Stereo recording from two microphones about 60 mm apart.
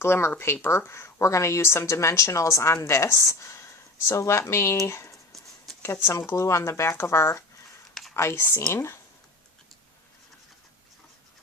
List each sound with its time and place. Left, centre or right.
0.0 s a woman's voice: left
0.9 s a woman's voice: left
5.1 s a sound: centre
5.8 s a woman's voice: left